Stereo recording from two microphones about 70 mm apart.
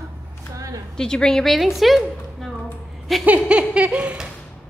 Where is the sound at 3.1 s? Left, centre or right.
Centre.